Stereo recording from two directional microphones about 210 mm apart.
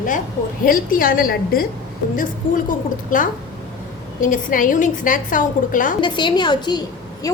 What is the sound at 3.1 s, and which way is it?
A woman's voice, 40° left (ahead or behind).